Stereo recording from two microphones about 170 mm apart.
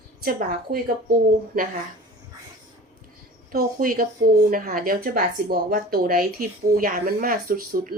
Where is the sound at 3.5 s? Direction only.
55° right (ahead or behind).